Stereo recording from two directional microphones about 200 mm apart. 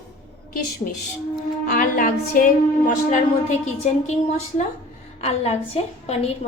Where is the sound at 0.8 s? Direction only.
40° left (ahead or behind).